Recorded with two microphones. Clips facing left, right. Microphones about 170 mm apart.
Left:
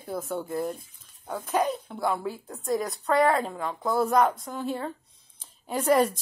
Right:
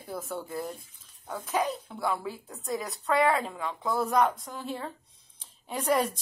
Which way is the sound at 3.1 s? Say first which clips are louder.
Left 2 dB; 40° left (ahead or behind).